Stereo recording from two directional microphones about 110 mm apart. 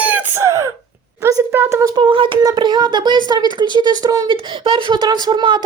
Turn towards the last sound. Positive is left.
turn(degrees=-45)  # may be behind; listen again after turning